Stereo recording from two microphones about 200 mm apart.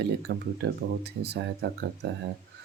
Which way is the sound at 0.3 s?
55° right (ahead or behind).